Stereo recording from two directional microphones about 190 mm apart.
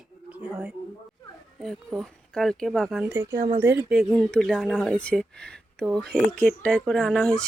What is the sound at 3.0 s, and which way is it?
Speech, 15° right (ahead or behind).